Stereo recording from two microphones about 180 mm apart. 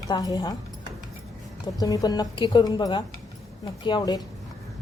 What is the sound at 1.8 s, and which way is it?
A woman's voice, 20° left (ahead or behind).